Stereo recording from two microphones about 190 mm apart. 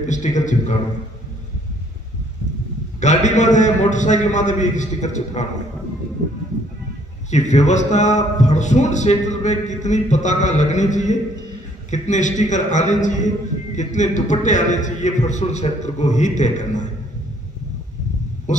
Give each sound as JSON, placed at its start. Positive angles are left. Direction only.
{"t": 0.0, "sound": "a man's voice", "side_deg": 40}
{"t": 3.0, "sound": "a man's voice", "side_deg": 40}
{"t": 7.2, "sound": "a man's voice", "side_deg": 35}
{"t": 18.5, "sound": "a sound", "side_deg": 40}